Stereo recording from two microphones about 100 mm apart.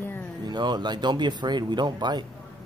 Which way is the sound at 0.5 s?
50° right (ahead or behind).